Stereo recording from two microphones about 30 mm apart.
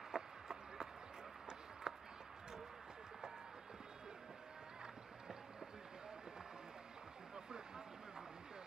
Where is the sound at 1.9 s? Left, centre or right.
Right.